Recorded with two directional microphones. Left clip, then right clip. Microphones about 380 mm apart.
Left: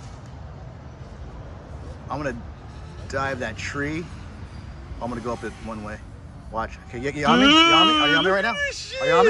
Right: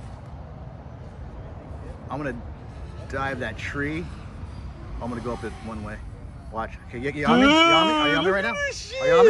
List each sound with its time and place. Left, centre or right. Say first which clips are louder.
2.0 s a man's voice: left 2 dB; centre
5.0 s speech: left 2 dB; centre
7.3 s speech: left 2 dB; centre
8.0 s speech: left 2 dB; centre
8.5 s speech: left 1 dB; centre